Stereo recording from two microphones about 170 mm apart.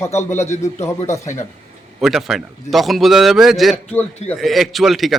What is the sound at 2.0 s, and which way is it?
A man's voice, centre (ahead or behind).